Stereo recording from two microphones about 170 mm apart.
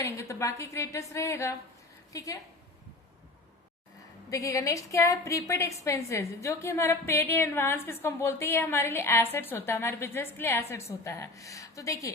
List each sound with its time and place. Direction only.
0.0 s a woman's voice: 15° left (ahead or behind)
4.3 s a woman's voice: 20° left (ahead or behind)